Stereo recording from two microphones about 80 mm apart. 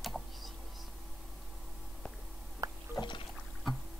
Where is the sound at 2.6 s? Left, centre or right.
Right.